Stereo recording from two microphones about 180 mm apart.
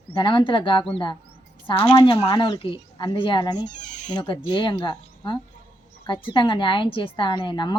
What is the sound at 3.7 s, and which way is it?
Speech, 40° left (ahead or behind).